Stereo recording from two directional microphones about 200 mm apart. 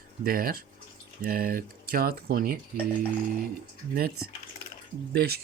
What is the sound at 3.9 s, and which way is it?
Speech, 50° right (ahead or behind).